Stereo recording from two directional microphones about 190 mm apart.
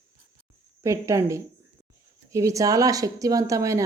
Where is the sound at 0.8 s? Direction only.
15° right (ahead or behind).